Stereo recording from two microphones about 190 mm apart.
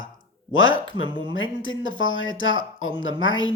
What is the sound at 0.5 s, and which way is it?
Speech, 90° left.